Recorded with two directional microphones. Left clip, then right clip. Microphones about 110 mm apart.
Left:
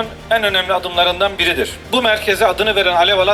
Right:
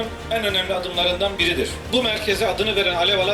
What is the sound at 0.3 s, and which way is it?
A man's voice, 30° left (ahead or behind).